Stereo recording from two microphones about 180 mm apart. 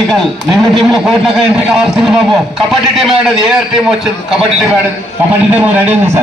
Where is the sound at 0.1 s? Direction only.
Centre (ahead or behind).